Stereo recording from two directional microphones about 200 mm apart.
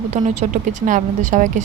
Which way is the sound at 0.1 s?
35° right (ahead or behind).